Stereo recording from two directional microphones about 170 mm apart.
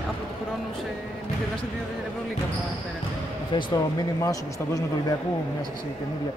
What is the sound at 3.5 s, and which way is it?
Speech, 20° left (ahead or behind).